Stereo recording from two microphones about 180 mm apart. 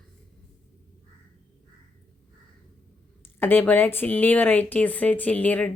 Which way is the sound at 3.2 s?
10° left (ahead or behind).